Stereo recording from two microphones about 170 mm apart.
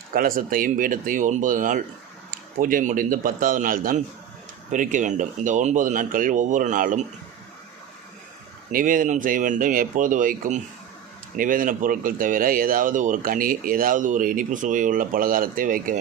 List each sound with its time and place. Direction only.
0.1 s speech: 55° right (ahead or behind)
8.7 s speech: 55° right (ahead or behind)